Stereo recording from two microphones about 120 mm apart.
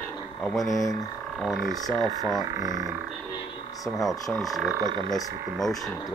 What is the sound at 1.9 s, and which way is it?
Speech, 30° right (ahead or behind).